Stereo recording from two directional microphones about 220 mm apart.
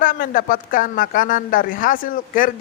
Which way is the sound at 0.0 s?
40° left (ahead or behind).